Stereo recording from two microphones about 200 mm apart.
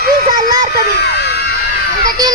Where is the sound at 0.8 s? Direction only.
55° left (ahead or behind).